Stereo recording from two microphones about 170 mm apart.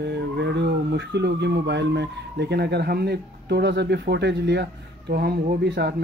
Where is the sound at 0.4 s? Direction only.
90° right.